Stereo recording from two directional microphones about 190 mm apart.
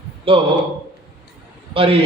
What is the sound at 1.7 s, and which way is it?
Speech, 30° right (ahead or behind).